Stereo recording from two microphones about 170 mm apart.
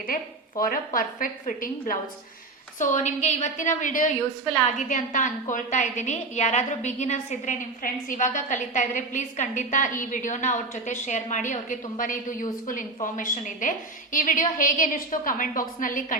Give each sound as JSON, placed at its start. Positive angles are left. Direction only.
{"t": 0.1, "sound": "a woman's voice", "side_deg": 55}